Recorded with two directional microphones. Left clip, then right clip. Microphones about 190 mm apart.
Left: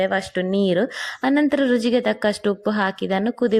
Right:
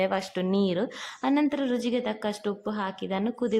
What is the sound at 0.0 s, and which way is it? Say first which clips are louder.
A woman's voice: left 6 dB; 10° left (ahead or behind).